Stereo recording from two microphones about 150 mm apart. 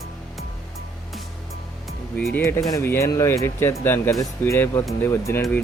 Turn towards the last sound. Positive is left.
turn(degrees=15)  # may be behind; listen again after turning